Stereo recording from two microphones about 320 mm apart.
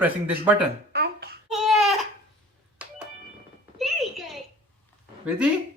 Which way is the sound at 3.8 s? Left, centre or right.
Centre.